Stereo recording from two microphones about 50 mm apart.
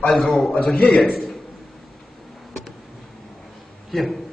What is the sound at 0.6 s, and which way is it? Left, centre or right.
Speech, left.